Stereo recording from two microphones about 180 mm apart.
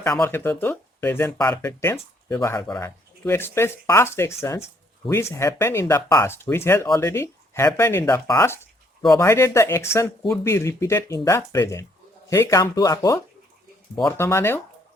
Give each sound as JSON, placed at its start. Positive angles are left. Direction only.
{"t": 0.2, "sound": "speech", "side_deg": 10}
{"t": 14.2, "sound": "speech", "side_deg": 15}